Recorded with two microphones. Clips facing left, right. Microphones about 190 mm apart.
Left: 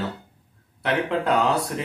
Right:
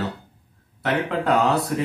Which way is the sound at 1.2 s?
Centre (ahead or behind).